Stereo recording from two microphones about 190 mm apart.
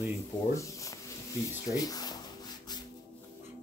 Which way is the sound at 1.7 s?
20° left (ahead or behind).